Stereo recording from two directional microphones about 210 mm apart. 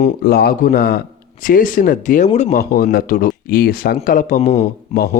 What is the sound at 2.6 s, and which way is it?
Speech, 45° left (ahead or behind).